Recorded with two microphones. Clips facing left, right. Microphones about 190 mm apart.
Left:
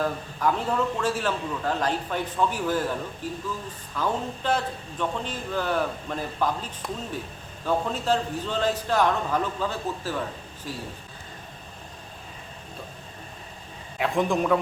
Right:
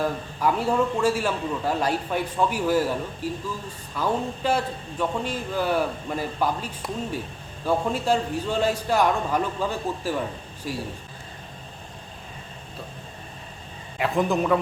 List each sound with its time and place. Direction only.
0.0 s a man's voice: 10° right (ahead or behind)
14.0 s a man's voice: centre (ahead or behind)